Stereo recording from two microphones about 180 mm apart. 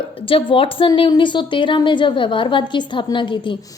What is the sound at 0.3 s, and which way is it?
A woman's voice, 30° left (ahead or behind).